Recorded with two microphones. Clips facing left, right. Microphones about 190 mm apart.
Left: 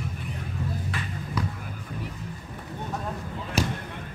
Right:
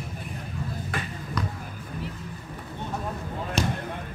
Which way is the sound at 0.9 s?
50° right (ahead or behind).